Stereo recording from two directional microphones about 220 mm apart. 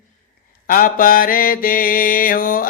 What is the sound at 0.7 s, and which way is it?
Mantra, 40° left (ahead or behind).